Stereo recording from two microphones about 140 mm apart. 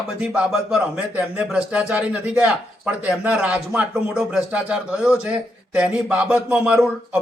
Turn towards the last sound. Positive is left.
turn(degrees=-10)  # may be behind; listen again after turning